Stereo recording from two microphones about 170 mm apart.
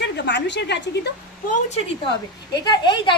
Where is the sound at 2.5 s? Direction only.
25° left (ahead or behind).